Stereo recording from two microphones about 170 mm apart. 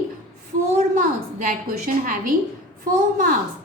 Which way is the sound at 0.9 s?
50° right (ahead or behind).